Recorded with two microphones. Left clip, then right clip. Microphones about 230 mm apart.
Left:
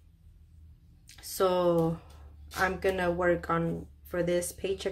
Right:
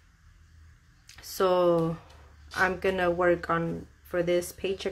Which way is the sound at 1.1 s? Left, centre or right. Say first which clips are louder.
Right 2 dB; centre.